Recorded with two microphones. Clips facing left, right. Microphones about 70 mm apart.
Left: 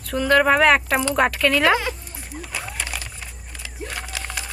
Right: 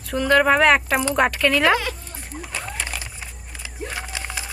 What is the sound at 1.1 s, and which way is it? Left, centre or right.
Speech, centre.